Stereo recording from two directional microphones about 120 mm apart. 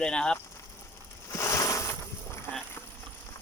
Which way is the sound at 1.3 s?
25° left (ahead or behind).